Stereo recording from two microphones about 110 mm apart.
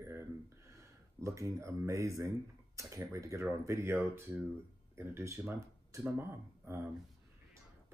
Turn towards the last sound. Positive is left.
turn(degrees=-20)  # may be behind; listen again after turning